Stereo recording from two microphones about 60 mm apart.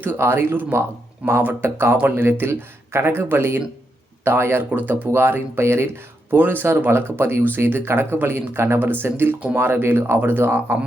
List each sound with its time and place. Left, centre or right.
0.0 s speech: right